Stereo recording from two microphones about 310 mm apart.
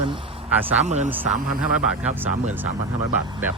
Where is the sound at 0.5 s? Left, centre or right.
Centre.